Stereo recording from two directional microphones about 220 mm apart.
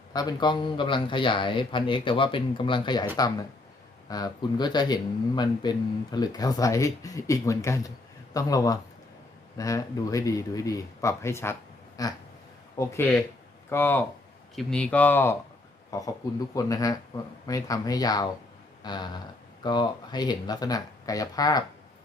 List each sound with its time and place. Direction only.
0.1 s a man's voice: 15° left (ahead or behind)
18.8 s a sound: 20° left (ahead or behind)
19.6 s speech: 20° left (ahead or behind)